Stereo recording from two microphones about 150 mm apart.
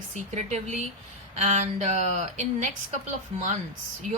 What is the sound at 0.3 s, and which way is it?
A woman's voice, 50° right (ahead or behind).